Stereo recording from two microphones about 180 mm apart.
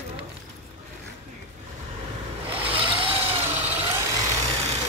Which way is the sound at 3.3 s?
10° right (ahead or behind).